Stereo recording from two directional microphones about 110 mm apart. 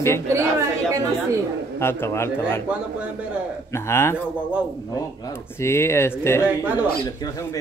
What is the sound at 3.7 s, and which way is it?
Speech, 25° left (ahead or behind).